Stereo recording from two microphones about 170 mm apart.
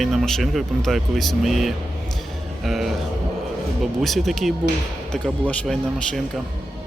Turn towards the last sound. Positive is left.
turn(degrees=5)  # may be behind; listen again after turning